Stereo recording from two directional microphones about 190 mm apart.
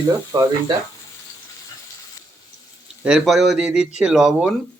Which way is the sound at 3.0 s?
Centre (ahead or behind).